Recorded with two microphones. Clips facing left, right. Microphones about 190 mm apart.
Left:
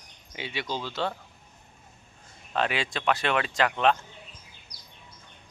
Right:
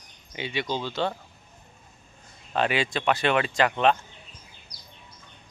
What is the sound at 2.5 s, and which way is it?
Speech, centre (ahead or behind).